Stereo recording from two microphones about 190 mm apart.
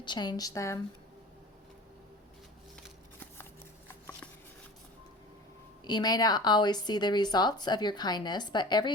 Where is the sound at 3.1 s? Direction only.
10° left (ahead or behind).